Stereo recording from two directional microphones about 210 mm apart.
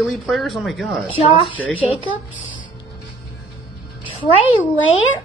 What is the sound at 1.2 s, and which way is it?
Speech, 25° left (ahead or behind).